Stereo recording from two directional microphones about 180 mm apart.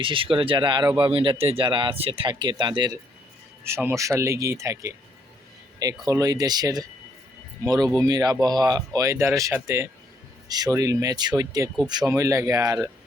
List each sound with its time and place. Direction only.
0.0 s speech: 30° right (ahead or behind)
3.6 s speech: 15° right (ahead or behind)